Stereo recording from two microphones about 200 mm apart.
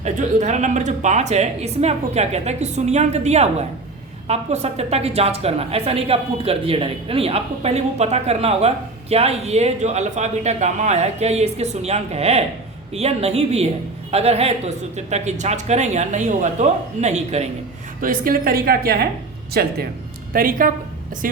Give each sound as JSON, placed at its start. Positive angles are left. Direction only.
{"t": 0.0, "sound": "a woman's voice", "side_deg": -35}
{"t": 18.0, "sound": "a woman's voice", "side_deg": -45}